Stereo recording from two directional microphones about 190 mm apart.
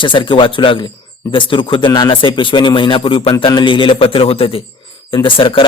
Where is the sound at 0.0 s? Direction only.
25° left (ahead or behind).